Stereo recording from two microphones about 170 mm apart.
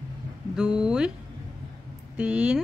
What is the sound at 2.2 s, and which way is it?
Speech, 5° right (ahead or behind).